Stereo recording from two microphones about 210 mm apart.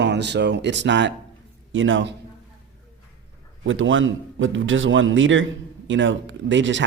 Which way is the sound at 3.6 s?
65° right (ahead or behind).